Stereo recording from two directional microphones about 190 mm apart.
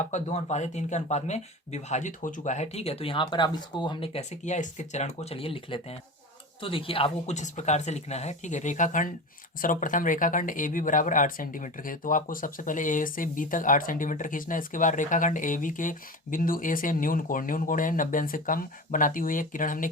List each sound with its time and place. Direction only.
0.0 s speech: 35° left (ahead or behind)